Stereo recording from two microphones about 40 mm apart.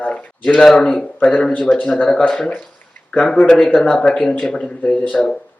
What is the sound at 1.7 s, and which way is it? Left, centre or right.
Speech, left.